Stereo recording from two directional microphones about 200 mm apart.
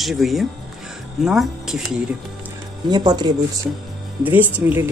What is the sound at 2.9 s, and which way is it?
Speech, 20° right (ahead or behind).